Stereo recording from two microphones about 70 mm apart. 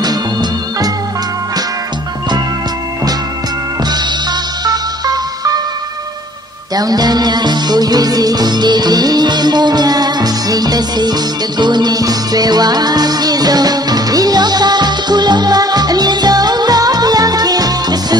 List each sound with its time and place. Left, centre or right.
0.0 s music: right
4.6 s music: right
6.7 s music: right